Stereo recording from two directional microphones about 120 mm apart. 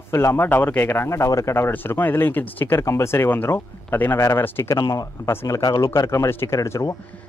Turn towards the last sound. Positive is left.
turn(degrees=25)  # may be behind; listen again after turning